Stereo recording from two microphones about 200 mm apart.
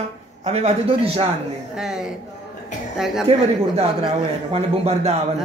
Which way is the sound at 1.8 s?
5° right (ahead or behind).